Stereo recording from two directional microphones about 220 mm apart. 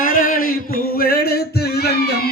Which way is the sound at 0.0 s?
40° left (ahead or behind).